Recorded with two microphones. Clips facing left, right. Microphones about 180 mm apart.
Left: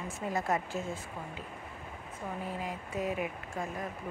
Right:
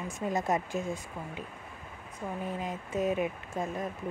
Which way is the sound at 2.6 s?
20° right (ahead or behind).